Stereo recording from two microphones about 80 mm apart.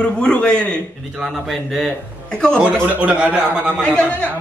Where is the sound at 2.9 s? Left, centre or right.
Centre.